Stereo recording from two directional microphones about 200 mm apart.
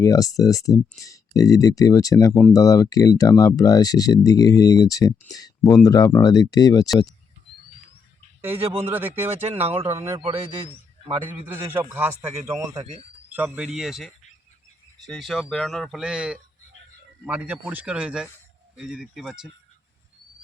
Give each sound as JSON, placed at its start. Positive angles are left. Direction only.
{"t": 0.0, "sound": "speech", "side_deg": 15}
{"t": 8.4, "sound": "a man's voice", "side_deg": -10}
{"t": 10.2, "sound": "speech", "side_deg": -25}
{"t": 11.5, "sound": "a man's voice", "side_deg": -10}